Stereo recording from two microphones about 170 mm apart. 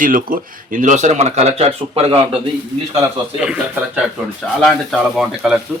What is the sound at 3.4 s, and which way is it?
Speech, 5° right (ahead or behind).